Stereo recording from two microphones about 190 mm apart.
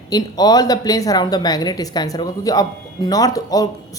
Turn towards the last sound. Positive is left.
turn(degrees=20)  # may be behind; listen again after turning